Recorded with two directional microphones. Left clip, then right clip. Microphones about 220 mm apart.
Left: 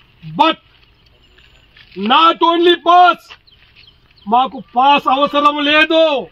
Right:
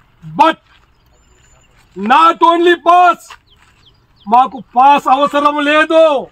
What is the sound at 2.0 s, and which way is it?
Speech, 5° left (ahead or behind).